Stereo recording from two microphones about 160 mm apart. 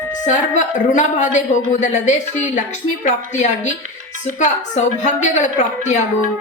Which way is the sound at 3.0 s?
45° left (ahead or behind).